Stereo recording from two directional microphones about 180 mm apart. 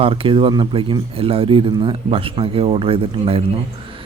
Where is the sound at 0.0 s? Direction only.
30° right (ahead or behind).